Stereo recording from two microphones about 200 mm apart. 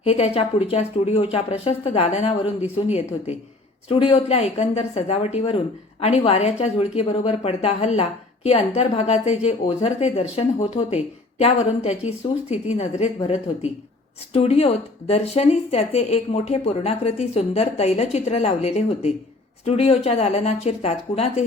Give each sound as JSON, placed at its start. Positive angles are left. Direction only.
{"t": 0.0, "sound": "speech", "side_deg": 30}